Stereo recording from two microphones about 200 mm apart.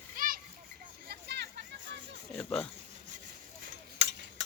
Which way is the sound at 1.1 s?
55° right (ahead or behind).